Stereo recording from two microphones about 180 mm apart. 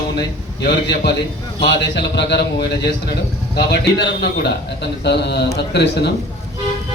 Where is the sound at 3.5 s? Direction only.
70° left (ahead or behind).